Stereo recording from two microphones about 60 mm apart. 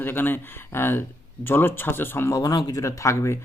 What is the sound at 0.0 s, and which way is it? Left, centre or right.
Speech, left.